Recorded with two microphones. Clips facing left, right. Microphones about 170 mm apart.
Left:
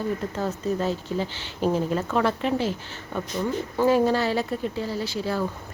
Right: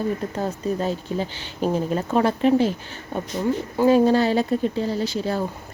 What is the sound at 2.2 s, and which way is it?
Speech, 15° right (ahead or behind).